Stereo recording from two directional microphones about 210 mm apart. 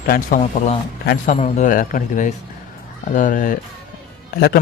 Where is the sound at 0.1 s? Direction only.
35° left (ahead or behind).